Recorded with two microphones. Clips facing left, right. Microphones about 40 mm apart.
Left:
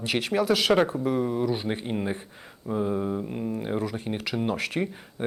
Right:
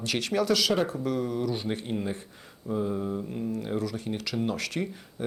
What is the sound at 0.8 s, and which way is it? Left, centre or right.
Speech, centre.